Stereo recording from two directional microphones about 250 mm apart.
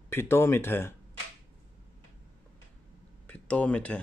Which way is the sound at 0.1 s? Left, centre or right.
Centre.